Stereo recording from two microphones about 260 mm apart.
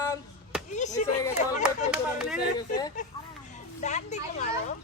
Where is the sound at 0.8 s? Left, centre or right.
Left.